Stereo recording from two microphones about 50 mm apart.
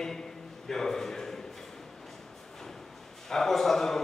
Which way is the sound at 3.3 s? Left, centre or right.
Centre.